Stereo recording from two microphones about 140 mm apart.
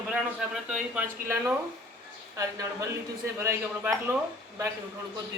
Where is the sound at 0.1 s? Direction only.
5° right (ahead or behind).